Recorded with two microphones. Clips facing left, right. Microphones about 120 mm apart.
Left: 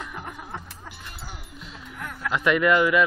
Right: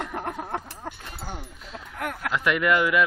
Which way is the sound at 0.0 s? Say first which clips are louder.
Right 6 dB; 65° right (ahead or behind).